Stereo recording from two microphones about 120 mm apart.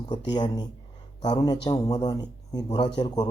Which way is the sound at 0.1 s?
35° left (ahead or behind).